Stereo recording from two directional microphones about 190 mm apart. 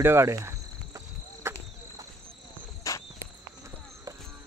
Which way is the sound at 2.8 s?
20° left (ahead or behind).